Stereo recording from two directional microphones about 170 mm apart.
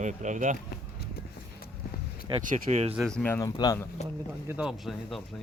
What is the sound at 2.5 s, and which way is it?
Speech, 40° right (ahead or behind).